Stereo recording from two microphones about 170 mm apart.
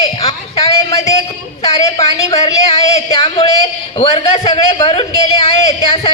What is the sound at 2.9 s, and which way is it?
A man's voice, 35° left (ahead or behind).